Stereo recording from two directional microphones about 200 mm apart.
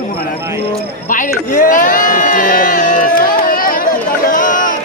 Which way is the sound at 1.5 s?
40° left (ahead or behind).